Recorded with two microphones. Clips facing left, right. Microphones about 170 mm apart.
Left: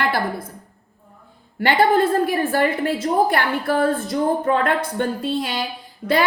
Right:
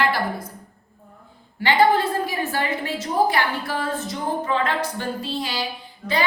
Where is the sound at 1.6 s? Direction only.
55° left (ahead or behind).